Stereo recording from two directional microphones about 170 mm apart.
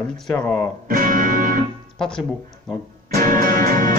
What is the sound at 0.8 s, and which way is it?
Music, 55° right (ahead or behind).